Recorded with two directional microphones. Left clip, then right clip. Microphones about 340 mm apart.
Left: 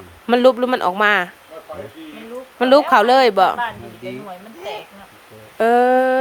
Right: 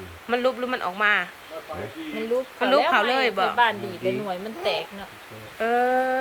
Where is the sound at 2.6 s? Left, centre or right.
Centre.